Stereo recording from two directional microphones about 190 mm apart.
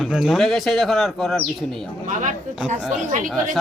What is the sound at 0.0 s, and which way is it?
Speech, centre (ahead or behind).